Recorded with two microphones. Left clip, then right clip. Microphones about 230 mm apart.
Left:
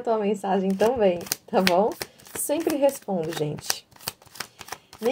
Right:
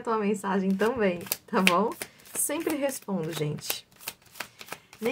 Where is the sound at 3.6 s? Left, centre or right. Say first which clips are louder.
Left 5 dB; left.